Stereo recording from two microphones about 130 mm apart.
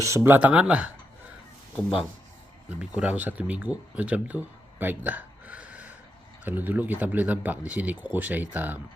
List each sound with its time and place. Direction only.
0.0 s speech: 20° right (ahead or behind)